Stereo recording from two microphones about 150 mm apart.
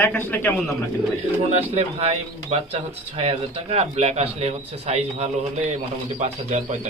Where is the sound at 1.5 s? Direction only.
40° right (ahead or behind).